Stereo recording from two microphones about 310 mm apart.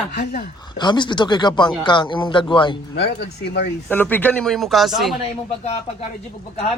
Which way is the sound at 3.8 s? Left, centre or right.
Centre.